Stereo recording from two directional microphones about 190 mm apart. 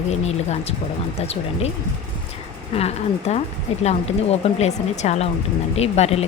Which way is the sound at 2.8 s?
35° left (ahead or behind).